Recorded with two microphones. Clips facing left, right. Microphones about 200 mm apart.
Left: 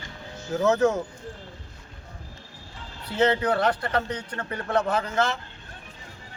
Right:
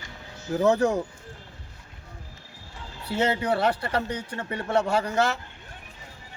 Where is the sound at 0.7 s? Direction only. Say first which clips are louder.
Left 1 dB; 30° right (ahead or behind).